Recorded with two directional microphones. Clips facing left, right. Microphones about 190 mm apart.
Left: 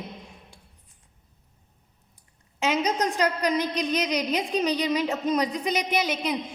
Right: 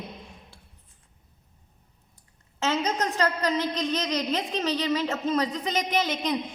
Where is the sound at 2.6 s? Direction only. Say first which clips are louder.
Left 2 dB; 15° left (ahead or behind).